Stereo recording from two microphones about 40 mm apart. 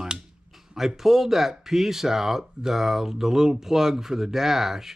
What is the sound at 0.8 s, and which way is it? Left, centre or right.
Speech, centre.